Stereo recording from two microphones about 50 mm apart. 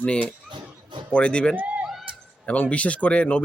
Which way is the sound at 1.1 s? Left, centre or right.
Left.